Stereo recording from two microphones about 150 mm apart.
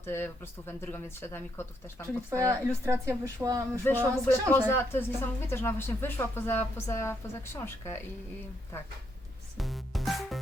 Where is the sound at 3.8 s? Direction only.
15° left (ahead or behind).